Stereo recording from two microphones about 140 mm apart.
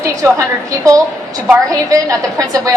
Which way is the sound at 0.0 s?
25° right (ahead or behind).